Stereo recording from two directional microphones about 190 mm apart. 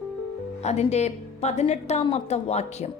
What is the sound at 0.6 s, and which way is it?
A woman's voice, 35° left (ahead or behind).